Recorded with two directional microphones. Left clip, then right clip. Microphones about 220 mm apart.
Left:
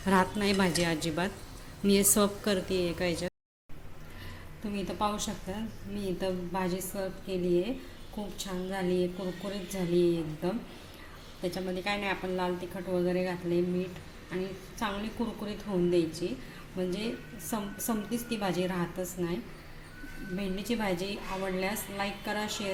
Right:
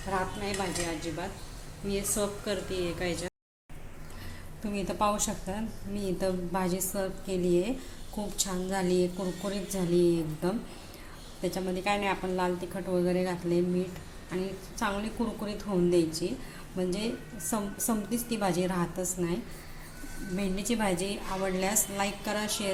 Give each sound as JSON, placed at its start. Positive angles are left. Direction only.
{"t": 0.1, "sound": "a woman's voice", "side_deg": 40}
{"t": 4.7, "sound": "a woman's voice", "side_deg": 5}
{"t": 11.5, "sound": "a woman's voice", "side_deg": 0}